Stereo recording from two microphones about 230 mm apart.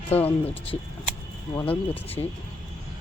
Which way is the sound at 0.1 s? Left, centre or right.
Centre.